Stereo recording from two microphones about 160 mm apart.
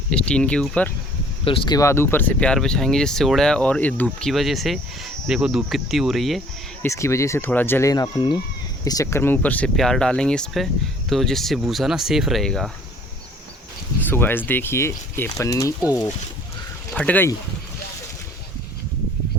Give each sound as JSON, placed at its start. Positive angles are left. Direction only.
{"t": 0.1, "sound": "speech", "side_deg": 5}
{"t": 1.5, "sound": "speech", "side_deg": 30}
{"t": 6.8, "sound": "speech", "side_deg": 20}
{"t": 14.0, "sound": "speech", "side_deg": 10}
{"t": 16.9, "sound": "speech", "side_deg": 10}